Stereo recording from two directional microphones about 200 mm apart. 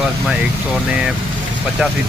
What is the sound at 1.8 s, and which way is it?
Speech, 5° right (ahead or behind).